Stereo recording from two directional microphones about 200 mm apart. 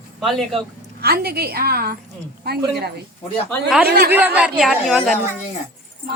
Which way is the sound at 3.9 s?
50° right (ahead or behind).